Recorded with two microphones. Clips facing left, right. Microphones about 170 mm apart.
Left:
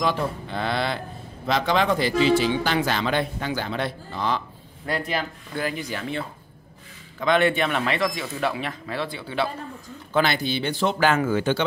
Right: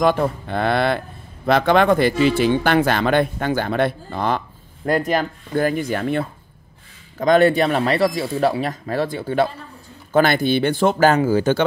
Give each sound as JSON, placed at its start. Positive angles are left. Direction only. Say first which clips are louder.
{"t": 0.0, "sound": "speech", "louder": "right 7 dB", "side_deg": -55}
{"t": 7.2, "sound": "speech", "louder": "right 6 dB", "side_deg": -40}
{"t": 11.2, "sound": "speech", "louder": "right 5 dB", "side_deg": -35}